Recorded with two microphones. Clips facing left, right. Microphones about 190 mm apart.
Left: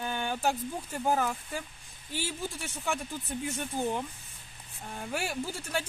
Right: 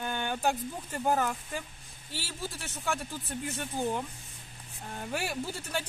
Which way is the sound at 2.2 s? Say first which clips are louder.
Left 4 dB; 15° left (ahead or behind).